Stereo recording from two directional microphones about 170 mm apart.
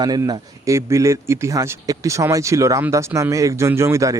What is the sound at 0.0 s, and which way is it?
Speech, 20° right (ahead or behind).